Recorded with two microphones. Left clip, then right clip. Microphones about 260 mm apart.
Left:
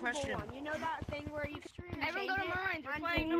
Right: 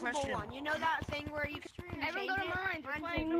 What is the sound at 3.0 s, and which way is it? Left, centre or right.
Speech, centre.